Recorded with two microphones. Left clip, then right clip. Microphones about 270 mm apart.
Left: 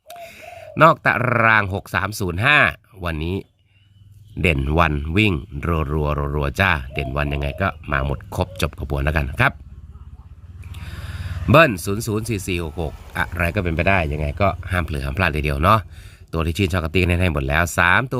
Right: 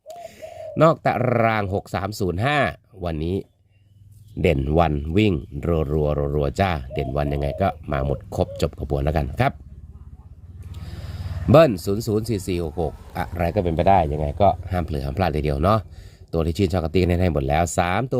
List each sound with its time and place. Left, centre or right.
0.1 s speech: centre
10.7 s speech: centre